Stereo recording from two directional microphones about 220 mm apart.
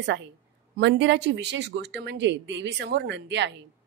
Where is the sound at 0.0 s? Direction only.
55° right (ahead or behind).